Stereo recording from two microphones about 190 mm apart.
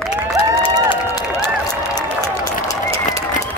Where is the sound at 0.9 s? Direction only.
20° left (ahead or behind).